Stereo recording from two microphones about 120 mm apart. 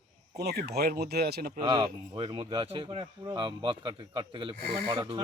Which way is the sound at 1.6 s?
45° right (ahead or behind).